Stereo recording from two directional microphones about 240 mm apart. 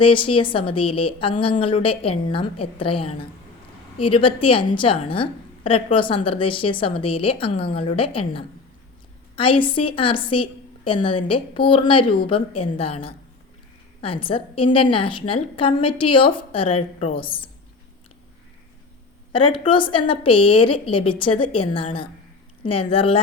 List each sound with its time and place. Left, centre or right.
0.0 s a woman's voice: left
9.3 s a woman's voice: left
19.3 s a woman's voice: left